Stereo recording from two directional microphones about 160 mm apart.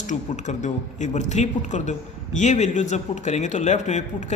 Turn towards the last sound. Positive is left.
turn(degrees=45)  # may be behind; listen again after turning